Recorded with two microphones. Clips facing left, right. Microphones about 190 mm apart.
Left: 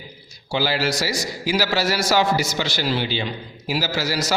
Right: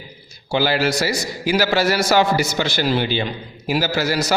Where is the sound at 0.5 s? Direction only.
55° right (ahead or behind).